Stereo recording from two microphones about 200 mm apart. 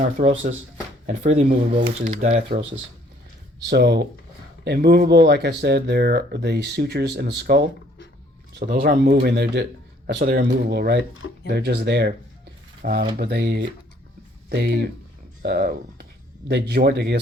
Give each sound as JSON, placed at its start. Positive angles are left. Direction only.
{"t": 0.0, "sound": "speech", "side_deg": -40}
{"t": 3.7, "sound": "speech", "side_deg": -55}